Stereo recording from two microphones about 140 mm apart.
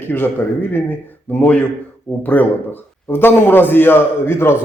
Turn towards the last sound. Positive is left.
turn(degrees=15)  # may be behind; listen again after turning